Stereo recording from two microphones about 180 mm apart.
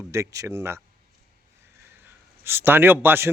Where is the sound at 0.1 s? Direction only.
15° right (ahead or behind).